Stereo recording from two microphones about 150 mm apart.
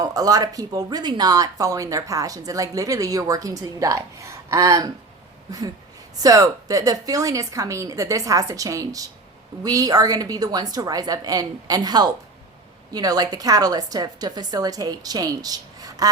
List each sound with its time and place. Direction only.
0.0 s speech: 25° right (ahead or behind)